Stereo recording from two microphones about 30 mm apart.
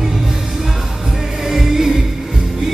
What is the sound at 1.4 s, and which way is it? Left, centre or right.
Music, centre.